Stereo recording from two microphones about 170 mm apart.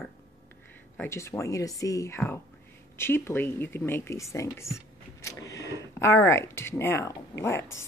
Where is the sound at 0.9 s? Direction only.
15° left (ahead or behind).